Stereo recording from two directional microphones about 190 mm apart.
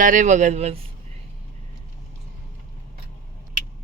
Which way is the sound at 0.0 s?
45° right (ahead or behind).